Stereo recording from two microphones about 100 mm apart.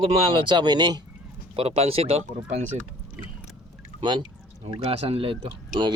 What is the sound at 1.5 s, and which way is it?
Speech, 90° right.